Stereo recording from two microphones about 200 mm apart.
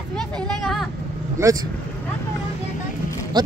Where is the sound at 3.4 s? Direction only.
20° right (ahead or behind).